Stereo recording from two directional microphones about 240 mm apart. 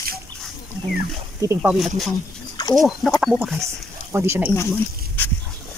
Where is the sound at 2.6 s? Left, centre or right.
Centre.